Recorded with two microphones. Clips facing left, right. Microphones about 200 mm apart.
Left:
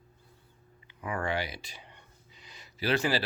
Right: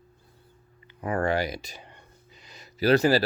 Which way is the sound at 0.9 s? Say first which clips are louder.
Right 7 dB; 40° right (ahead or behind).